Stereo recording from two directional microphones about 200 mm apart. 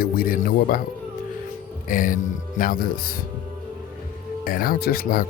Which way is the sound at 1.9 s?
40° left (ahead or behind).